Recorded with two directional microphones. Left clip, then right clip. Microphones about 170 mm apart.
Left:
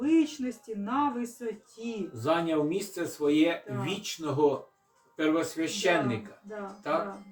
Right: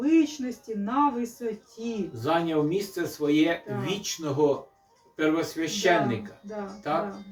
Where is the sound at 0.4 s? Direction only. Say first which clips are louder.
Right 3 dB; 20° left (ahead or behind).